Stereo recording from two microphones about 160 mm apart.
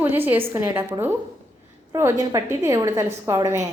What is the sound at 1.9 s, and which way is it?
A woman's voice, 20° right (ahead or behind).